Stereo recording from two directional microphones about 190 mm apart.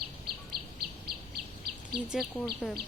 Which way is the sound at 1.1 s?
55° right (ahead or behind).